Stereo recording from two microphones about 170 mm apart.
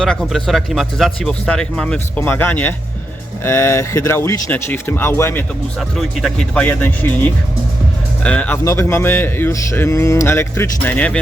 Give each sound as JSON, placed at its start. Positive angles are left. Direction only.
{"t": 0.0, "sound": "a man's voice", "side_deg": 5}
{"t": 6.0, "sound": "a man's voice", "side_deg": 0}